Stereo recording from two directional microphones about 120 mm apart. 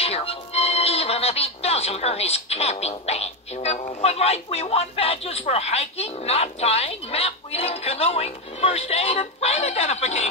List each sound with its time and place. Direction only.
0.0 s speech: 55° left (ahead or behind)